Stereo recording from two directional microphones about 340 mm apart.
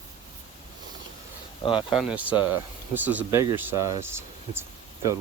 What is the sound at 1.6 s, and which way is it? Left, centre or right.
Speech, centre.